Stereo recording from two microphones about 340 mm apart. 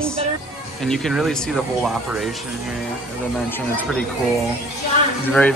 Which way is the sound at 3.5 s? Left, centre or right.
Centre.